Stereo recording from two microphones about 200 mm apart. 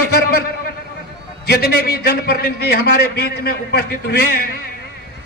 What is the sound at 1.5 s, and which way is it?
A man's voice, 50° left (ahead or behind).